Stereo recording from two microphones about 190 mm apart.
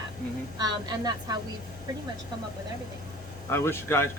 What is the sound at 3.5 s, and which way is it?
Speech, 15° left (ahead or behind).